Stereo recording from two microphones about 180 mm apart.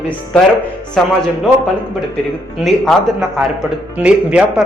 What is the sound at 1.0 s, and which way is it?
Speech, centre (ahead or behind).